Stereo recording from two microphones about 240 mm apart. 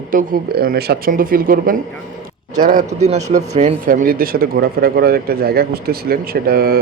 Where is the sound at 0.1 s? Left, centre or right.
Right.